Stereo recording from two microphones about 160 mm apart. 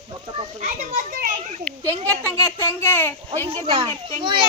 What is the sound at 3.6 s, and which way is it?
Speech, 35° right (ahead or behind).